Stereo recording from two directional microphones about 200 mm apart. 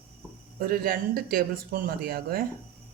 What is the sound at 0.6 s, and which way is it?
Speech, 50° right (ahead or behind).